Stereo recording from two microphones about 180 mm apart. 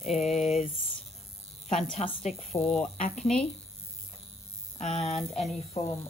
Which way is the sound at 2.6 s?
5° left (ahead or behind).